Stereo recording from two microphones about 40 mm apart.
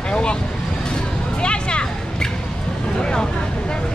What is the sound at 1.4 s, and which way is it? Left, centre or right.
Music, left.